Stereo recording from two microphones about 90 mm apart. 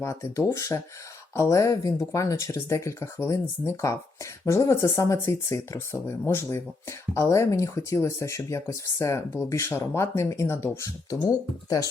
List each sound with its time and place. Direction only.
0.0 s speech: 35° left (ahead or behind)